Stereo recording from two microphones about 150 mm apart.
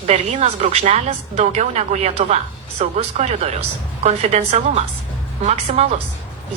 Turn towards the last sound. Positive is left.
turn(degrees=-45)  # may be behind; listen again after turning